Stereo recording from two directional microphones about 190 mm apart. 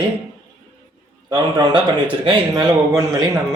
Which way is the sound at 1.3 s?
20° right (ahead or behind).